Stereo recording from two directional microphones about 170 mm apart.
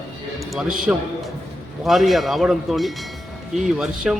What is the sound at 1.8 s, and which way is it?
A man's voice, centre (ahead or behind).